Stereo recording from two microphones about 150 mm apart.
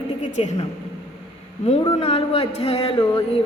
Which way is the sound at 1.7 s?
40° left (ahead or behind).